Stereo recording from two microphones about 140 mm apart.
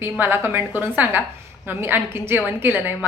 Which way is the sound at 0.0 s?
15° right (ahead or behind).